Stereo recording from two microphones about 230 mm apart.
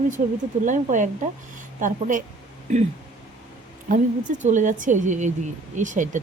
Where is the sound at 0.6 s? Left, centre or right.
Right.